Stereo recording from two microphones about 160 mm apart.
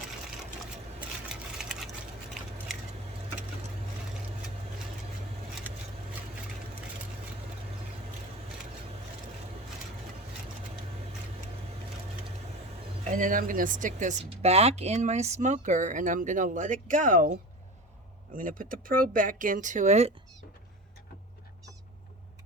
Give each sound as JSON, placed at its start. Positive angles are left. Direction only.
{"t": 0.9, "sound": "sewing machine", "side_deg": -5}
{"t": 13.1, "sound": "speech", "side_deg": -55}
{"t": 14.3, "sound": "speech", "side_deg": -40}
{"t": 18.3, "sound": "speech", "side_deg": -60}